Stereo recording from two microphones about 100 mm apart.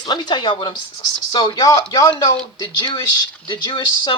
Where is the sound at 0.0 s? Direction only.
45° left (ahead or behind).